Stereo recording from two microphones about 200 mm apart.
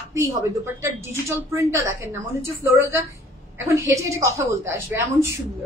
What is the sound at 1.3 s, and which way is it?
A woman's voice, 15° right (ahead or behind).